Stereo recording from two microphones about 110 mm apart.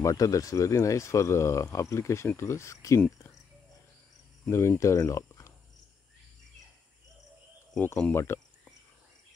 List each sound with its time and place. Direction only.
0.0 s speech: 30° left (ahead or behind)
4.5 s speech: 25° left (ahead or behind)
8.1 s cricket: 25° left (ahead or behind)